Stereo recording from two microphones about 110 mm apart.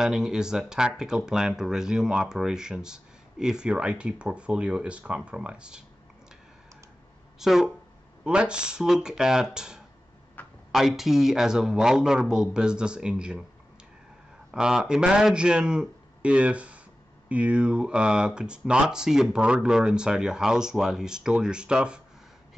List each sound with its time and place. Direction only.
0.0 s a man's voice: 5° right (ahead or behind)
7.3 s a man's voice: 5° right (ahead or behind)
10.4 s a sound: 15° left (ahead or behind)
10.7 s a man's voice: centre (ahead or behind)
14.5 s a man's voice: 5° right (ahead or behind)